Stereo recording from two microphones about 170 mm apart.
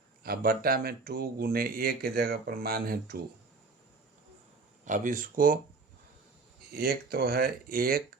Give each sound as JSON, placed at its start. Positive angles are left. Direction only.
{"t": 0.2, "sound": "speech", "side_deg": -60}
{"t": 4.9, "sound": "speech", "side_deg": -50}
{"t": 6.7, "sound": "speech", "side_deg": -65}